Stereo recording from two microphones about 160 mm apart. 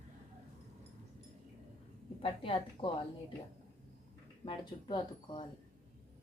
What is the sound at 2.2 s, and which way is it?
Speech, 35° left (ahead or behind).